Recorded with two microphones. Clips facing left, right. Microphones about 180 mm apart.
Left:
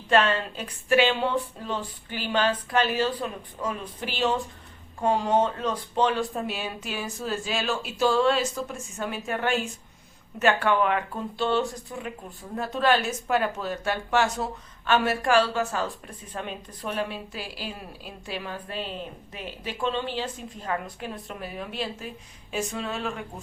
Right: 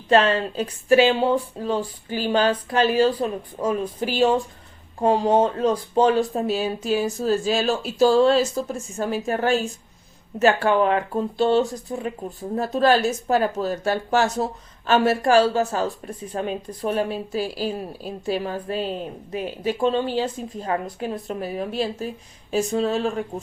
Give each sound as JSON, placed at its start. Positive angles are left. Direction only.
{"t": 0.1, "sound": "speech", "side_deg": -35}